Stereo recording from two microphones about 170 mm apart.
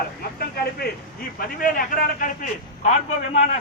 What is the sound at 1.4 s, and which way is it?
A man's voice, 55° left (ahead or behind).